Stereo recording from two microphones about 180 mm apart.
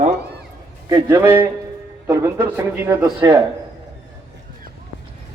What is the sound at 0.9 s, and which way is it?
A man's voice, 20° right (ahead or behind).